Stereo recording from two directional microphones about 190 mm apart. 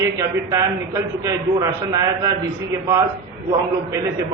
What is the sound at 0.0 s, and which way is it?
A man's voice, 15° right (ahead or behind).